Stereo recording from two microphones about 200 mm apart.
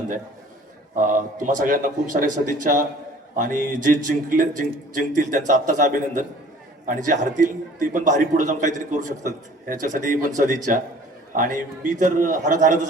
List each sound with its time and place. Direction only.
0.9 s a man's voice: 40° right (ahead or behind)